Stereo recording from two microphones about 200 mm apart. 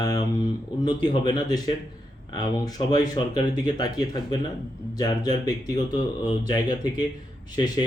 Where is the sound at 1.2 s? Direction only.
20° left (ahead or behind).